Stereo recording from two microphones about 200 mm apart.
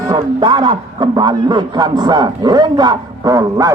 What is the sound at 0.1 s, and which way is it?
A man's voice, 20° right (ahead or behind).